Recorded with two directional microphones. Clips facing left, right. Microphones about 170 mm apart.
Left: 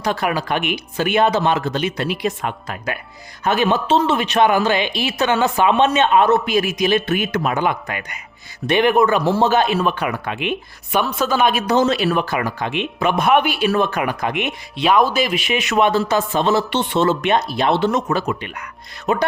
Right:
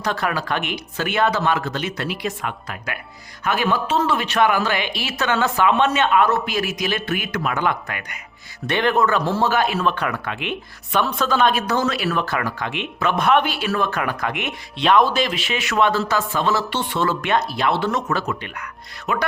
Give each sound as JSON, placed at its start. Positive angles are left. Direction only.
{"t": 0.0, "sound": "speech", "side_deg": 15}
{"t": 9.9, "sound": "speech", "side_deg": 10}
{"t": 10.9, "sound": "speech", "side_deg": 5}
{"t": 12.2, "sound": "speech", "side_deg": 15}
{"t": 14.8, "sound": "speech", "side_deg": 5}